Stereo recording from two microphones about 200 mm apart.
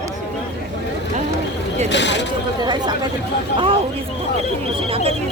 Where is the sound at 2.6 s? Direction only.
20° right (ahead or behind).